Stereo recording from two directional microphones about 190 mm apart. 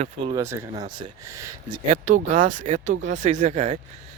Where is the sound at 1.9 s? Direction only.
40° right (ahead or behind).